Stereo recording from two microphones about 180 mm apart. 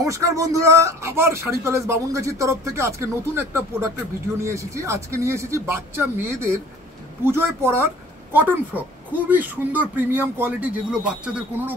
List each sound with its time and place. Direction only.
0.0 s speech: 15° right (ahead or behind)